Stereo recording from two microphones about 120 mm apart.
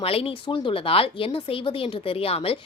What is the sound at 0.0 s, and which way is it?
A woman's voice, 55° left (ahead or behind).